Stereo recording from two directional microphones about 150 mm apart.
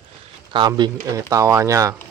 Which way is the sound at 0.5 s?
30° right (ahead or behind).